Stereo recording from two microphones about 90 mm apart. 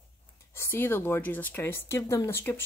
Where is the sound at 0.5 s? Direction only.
25° left (ahead or behind).